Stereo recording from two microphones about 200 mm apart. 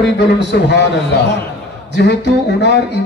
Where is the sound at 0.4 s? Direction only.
60° left (ahead or behind).